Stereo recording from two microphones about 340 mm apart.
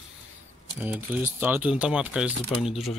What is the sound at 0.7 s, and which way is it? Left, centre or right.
Speech, centre.